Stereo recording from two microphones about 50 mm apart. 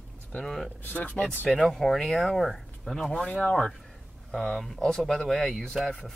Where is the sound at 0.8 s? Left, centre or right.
Left.